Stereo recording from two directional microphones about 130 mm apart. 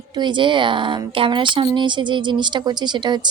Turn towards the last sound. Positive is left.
turn(degrees=-35)  # may be behind; listen again after turning